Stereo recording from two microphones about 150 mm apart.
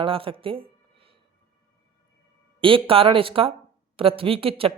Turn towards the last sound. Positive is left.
turn(degrees=-40)  # may be behind; listen again after turning